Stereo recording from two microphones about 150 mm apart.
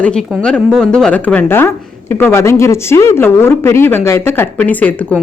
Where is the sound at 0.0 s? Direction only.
5° left (ahead or behind).